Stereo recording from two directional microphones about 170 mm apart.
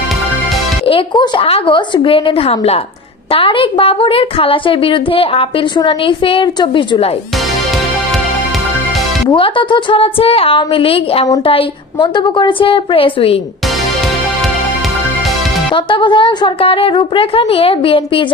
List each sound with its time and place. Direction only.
0.9 s a woman's voice: 30° left (ahead or behind)
9.3 s a woman's voice: 30° left (ahead or behind)
15.7 s a woman's voice: 30° left (ahead or behind)